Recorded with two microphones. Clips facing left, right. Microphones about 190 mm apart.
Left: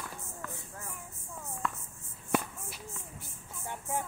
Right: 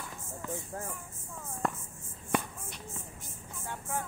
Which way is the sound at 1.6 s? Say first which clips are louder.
Right 4 dB; 45° right (ahead or behind).